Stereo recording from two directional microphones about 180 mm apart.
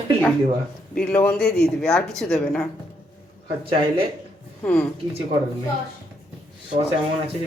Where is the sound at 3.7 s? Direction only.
30° right (ahead or behind).